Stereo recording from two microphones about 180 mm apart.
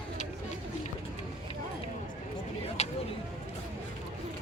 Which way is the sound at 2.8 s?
35° left (ahead or behind).